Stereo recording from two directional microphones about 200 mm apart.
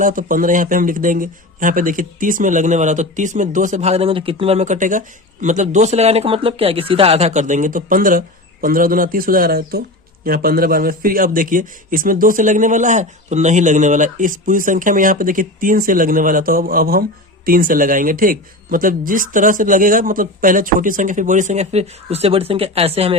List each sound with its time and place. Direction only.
0.0 s a man's voice: 40° right (ahead or behind)